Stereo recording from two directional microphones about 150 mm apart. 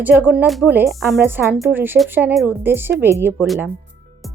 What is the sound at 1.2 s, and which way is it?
Speech, 15° right (ahead or behind).